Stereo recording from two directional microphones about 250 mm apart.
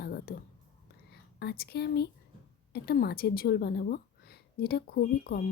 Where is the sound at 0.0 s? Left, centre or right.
Left.